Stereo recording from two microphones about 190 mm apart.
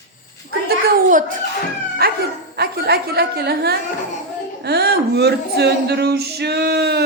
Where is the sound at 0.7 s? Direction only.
50° right (ahead or behind).